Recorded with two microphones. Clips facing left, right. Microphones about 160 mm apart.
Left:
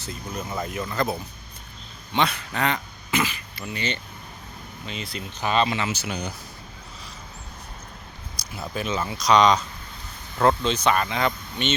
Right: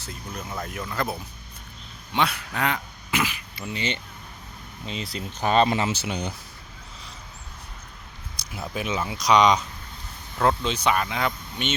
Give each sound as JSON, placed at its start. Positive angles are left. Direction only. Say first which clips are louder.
{"t": 0.1, "sound": "speech", "louder": "left 3 dB", "side_deg": 5}
{"t": 2.1, "sound": "speech", "louder": "left 1 dB", "side_deg": -5}
{"t": 3.7, "sound": "speech", "louder": "even", "side_deg": -25}
{"t": 4.9, "sound": "speech", "louder": "right 2 dB", "side_deg": -35}
{"t": 8.5, "sound": "speech", "louder": "left 1 dB", "side_deg": -15}